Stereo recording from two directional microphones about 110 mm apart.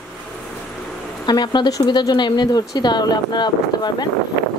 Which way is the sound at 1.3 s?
40° left (ahead or behind).